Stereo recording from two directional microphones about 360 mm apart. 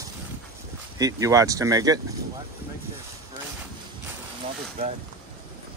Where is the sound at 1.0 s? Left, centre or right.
Centre.